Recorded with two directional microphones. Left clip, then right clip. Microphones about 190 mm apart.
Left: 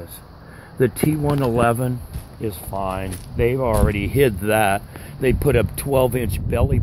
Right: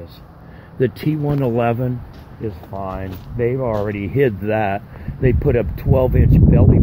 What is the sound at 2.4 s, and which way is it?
Speech, 20° left (ahead or behind).